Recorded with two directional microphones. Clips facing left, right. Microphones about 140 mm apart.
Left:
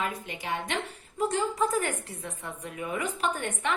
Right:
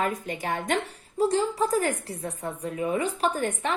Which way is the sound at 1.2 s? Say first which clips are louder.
Right 4 dB; 35° right (ahead or behind).